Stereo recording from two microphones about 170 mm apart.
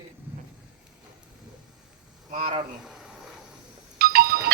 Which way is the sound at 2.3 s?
40° right (ahead or behind).